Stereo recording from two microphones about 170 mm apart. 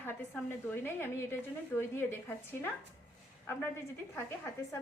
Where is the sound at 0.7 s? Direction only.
10° left (ahead or behind).